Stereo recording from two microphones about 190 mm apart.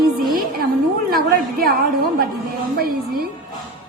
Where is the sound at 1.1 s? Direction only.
50° right (ahead or behind).